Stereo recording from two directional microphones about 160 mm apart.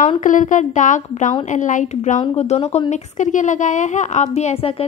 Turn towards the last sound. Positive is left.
turn(degrees=35)  # may be behind; listen again after turning